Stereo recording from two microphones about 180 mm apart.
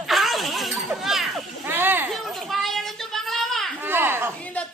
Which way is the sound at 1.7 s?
10° right (ahead or behind).